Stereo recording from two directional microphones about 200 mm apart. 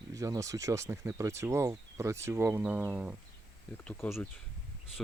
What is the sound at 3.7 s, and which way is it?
Speech, 5° left (ahead or behind).